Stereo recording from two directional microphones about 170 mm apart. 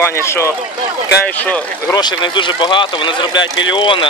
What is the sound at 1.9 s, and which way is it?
Speech, 25° left (ahead or behind).